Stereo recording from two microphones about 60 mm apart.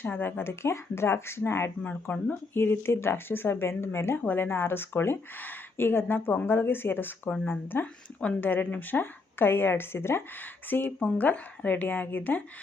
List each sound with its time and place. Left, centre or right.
0.0 s speech: left
1.8 s speech: left
2.5 s speech: left
4.2 s speech: left
10.7 s speech: left